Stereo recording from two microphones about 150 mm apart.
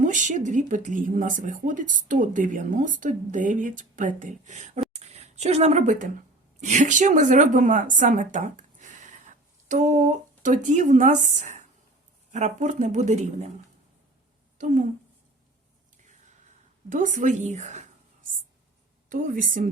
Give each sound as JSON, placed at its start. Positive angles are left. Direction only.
{"t": 0.0, "sound": "speech", "side_deg": -55}
{"t": 4.9, "sound": "a sound", "side_deg": -45}
{"t": 6.6, "sound": "speech", "side_deg": -55}
{"t": 14.6, "sound": "a woman's voice", "side_deg": -55}
{"t": 16.9, "sound": "speech", "side_deg": -60}
{"t": 19.0, "sound": "a woman's voice", "side_deg": -60}